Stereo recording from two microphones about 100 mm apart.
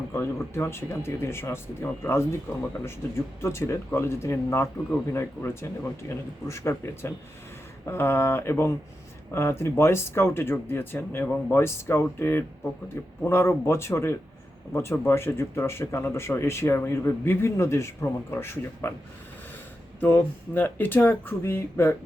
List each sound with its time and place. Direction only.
0.1 s speech: 25° left (ahead or behind)
20.0 s speech: 20° left (ahead or behind)